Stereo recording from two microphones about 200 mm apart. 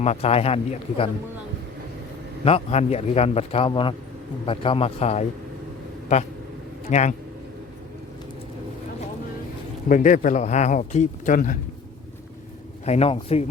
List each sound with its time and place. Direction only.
0.0 s speech: 30° left (ahead or behind)
2.4 s a man's voice: 30° left (ahead or behind)
6.9 s speech: 35° left (ahead or behind)
9.9 s speech: 40° left (ahead or behind)
12.8 s speech: 30° left (ahead or behind)